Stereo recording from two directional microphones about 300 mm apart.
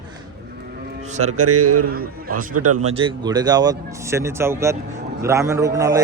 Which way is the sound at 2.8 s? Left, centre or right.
Centre.